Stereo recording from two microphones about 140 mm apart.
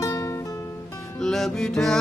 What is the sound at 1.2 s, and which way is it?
Music, 5° left (ahead or behind).